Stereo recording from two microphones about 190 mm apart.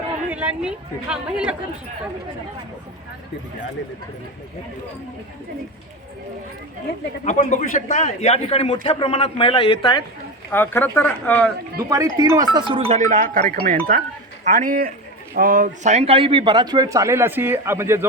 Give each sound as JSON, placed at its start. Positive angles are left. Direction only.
{"t": 0.3, "sound": "speech", "side_deg": -5}
{"t": 7.3, "sound": "a man's voice", "side_deg": 40}
{"t": 10.5, "sound": "speech", "side_deg": 10}
{"t": 11.9, "sound": "a man's voice", "side_deg": -15}